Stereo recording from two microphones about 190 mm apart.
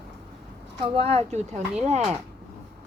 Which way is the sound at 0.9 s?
35° right (ahead or behind).